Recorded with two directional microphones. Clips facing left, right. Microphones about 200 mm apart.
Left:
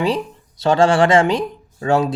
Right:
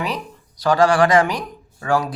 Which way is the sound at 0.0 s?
25° left (ahead or behind).